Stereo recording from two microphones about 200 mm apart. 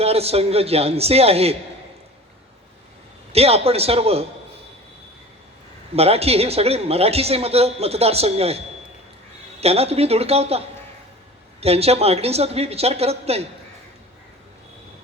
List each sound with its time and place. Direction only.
0.0 s a woman's voice: 30° right (ahead or behind)
3.3 s a woman's voice: 30° right (ahead or behind)
5.9 s a woman's voice: 30° right (ahead or behind)
11.6 s a woman's voice: 30° right (ahead or behind)